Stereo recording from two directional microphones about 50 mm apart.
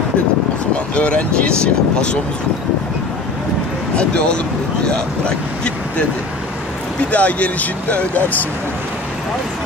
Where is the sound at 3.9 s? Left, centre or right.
Left.